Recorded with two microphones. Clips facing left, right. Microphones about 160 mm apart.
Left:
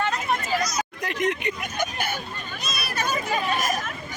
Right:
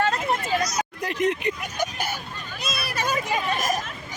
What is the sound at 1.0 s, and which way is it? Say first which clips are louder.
Speech: right 2 dB; 30° right (ahead or behind).